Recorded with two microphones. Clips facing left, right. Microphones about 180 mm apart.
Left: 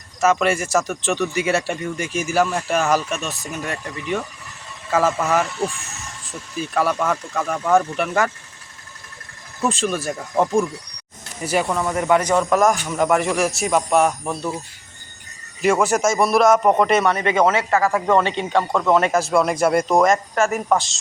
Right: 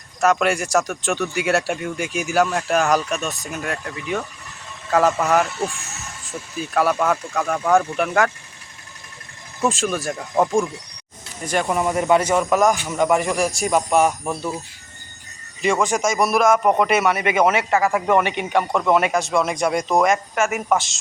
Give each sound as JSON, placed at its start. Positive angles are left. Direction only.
{"t": 0.2, "sound": "speech", "side_deg": 0}
{"t": 6.7, "sound": "speech", "side_deg": -5}
{"t": 9.6, "sound": "speech", "side_deg": 0}
{"t": 11.7, "sound": "a man's voice", "side_deg": -10}
{"t": 11.9, "sound": "speech", "side_deg": -25}
{"t": 12.3, "sound": "speech", "side_deg": -5}
{"t": 15.6, "sound": "a man's voice", "side_deg": 5}
{"t": 19.1, "sound": "speech", "side_deg": 0}